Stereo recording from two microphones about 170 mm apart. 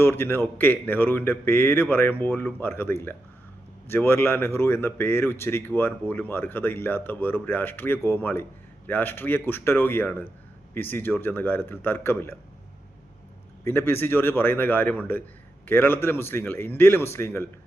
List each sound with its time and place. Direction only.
0.0 s speech: 15° left (ahead or behind)
13.7 s speech: 15° left (ahead or behind)